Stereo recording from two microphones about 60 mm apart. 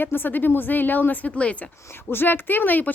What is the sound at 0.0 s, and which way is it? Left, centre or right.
Speech, left.